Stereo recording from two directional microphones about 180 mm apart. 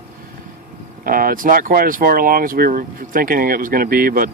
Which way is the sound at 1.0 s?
50° right (ahead or behind).